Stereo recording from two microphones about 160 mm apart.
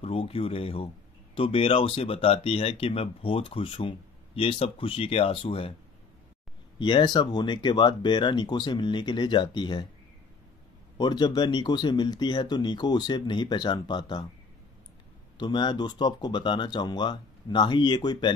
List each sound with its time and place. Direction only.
0.0 s speech: 35° left (ahead or behind)
6.8 s speech: 30° left (ahead or behind)
11.0 s speech: 25° left (ahead or behind)
15.3 s speech: 30° left (ahead or behind)